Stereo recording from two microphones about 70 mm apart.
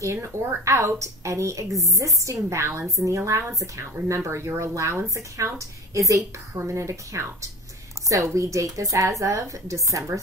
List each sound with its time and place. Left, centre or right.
0.0 s a woman's voice: right
6.5 s a woman's voice: right